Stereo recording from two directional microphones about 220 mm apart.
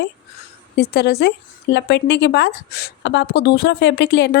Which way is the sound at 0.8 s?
45° left (ahead or behind).